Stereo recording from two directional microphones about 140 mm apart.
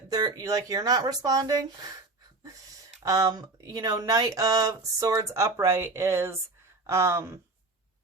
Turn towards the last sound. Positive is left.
turn(degrees=-20)  # may be behind; listen again after turning